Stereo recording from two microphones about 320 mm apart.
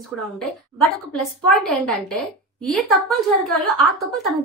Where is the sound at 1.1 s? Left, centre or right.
Centre.